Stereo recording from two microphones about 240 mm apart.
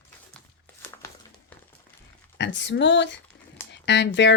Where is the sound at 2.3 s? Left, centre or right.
Left.